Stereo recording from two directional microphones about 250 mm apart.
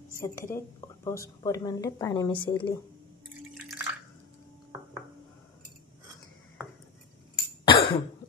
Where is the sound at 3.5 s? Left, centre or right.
Centre.